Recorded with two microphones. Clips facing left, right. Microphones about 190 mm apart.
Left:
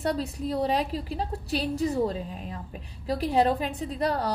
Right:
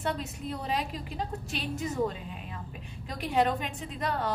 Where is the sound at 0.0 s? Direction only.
35° left (ahead or behind).